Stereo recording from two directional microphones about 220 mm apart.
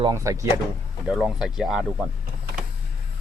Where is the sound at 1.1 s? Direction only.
Centre (ahead or behind).